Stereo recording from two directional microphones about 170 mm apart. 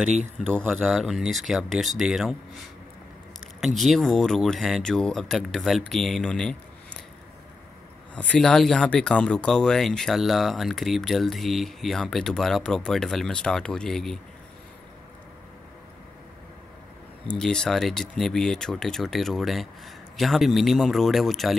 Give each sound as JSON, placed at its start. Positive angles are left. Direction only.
{"t": 0.5, "sound": "speech", "side_deg": 5}
{"t": 3.6, "sound": "speech", "side_deg": 0}
{"t": 8.1, "sound": "speech", "side_deg": 5}
{"t": 17.3, "sound": "speech", "side_deg": 5}